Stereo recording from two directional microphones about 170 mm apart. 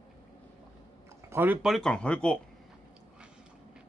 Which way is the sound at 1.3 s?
10° right (ahead or behind).